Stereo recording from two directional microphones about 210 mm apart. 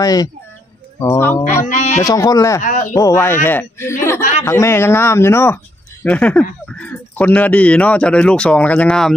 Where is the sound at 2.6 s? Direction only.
35° left (ahead or behind).